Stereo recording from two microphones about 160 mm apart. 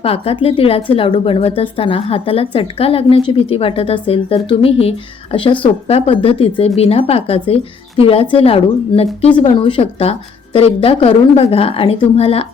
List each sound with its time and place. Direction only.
0.0 s a woman's voice: 35° left (ahead or behind)